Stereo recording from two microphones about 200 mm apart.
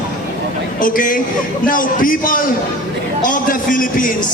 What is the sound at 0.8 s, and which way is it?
A man's voice, 45° left (ahead or behind).